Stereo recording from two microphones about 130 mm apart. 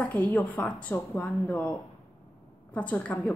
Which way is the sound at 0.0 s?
10° left (ahead or behind).